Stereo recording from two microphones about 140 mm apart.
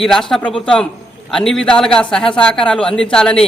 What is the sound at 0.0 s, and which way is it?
A man's voice, centre (ahead or behind).